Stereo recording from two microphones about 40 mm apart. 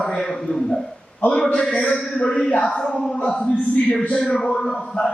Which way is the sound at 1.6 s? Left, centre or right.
Left.